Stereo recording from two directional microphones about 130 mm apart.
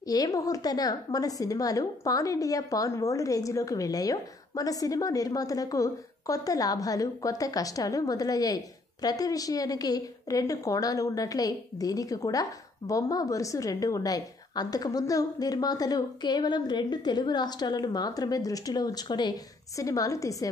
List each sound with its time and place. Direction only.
0.1 s a woman's voice: 30° left (ahead or behind)